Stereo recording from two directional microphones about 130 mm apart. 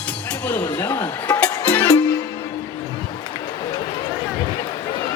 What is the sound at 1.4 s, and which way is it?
Music, 10° left (ahead or behind).